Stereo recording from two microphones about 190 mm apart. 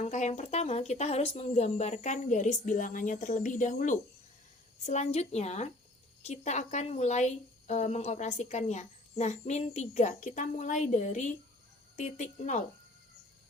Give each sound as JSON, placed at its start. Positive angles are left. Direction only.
{"t": 0.0, "sound": "speech", "side_deg": 40}